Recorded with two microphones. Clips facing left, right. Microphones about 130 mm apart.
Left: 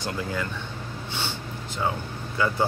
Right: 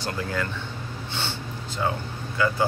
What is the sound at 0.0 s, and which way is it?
Speech, 20° left (ahead or behind).